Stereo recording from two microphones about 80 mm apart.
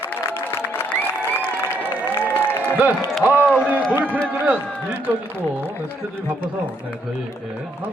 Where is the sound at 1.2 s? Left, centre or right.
Left.